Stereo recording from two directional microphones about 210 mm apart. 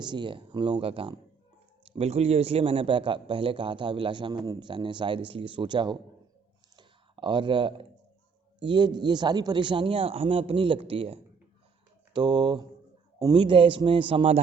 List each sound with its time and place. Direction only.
0.0 s a man's voice: 20° right (ahead or behind)
6.7 s a sound: 20° right (ahead or behind)
8.6 s a man's voice: 20° right (ahead or behind)